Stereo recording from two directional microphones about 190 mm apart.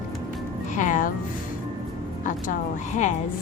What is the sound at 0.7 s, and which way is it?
Music, 40° left (ahead or behind).